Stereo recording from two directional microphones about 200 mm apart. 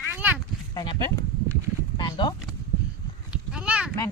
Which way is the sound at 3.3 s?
5° right (ahead or behind).